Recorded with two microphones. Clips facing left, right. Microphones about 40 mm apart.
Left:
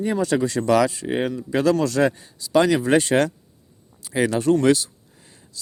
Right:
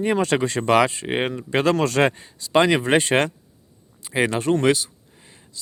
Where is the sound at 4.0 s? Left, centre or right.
Right.